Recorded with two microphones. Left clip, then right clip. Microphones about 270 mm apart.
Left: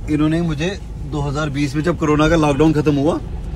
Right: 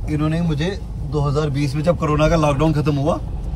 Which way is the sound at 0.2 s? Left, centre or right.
Centre.